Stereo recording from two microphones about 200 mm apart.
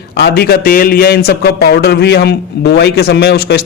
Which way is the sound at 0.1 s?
55° left (ahead or behind).